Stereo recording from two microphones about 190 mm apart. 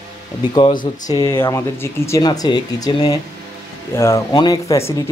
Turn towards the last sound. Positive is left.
turn(degrees=15)  # may be behind; listen again after turning